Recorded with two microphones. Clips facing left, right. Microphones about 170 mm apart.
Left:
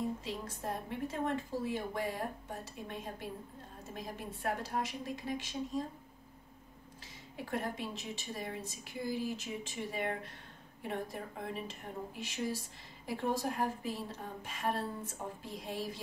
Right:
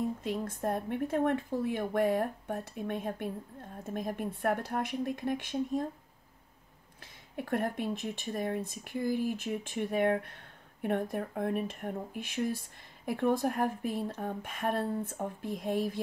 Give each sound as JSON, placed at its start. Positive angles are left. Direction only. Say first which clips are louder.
{"t": 0.2, "sound": "speech", "louder": "right 7 dB", "side_deg": -55}
{"t": 7.3, "sound": "speech", "louder": "right 6 dB", "side_deg": -55}